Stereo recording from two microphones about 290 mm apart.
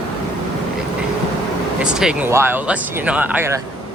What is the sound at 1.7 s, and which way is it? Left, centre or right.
Speech, centre.